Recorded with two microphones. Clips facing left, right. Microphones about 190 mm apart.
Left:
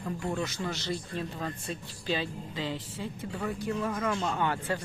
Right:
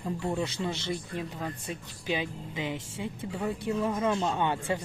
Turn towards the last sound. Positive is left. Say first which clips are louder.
# right 1 dB
turn(degrees=-20)  # may be behind; listen again after turning